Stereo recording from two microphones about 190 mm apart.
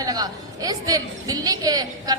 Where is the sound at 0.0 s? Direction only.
20° right (ahead or behind).